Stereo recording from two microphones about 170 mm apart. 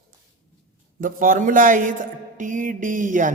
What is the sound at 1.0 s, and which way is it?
Speech, 55° right (ahead or behind).